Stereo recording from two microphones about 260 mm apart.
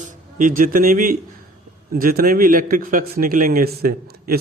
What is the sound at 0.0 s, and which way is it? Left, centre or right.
A man's voice, right.